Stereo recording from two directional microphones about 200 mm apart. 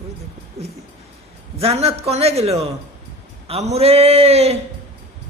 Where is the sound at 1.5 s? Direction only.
30° right (ahead or behind).